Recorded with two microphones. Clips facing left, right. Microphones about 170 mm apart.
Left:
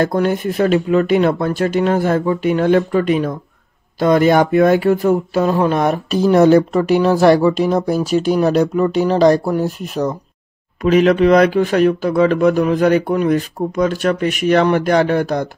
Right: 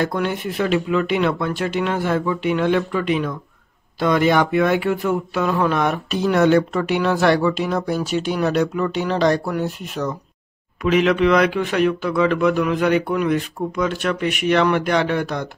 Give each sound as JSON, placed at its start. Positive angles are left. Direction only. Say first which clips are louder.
{"t": 0.0, "sound": "speech", "louder": "left 6 dB", "side_deg": 40}